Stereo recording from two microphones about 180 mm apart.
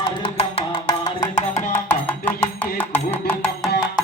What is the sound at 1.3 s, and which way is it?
Music, 40° left (ahead or behind).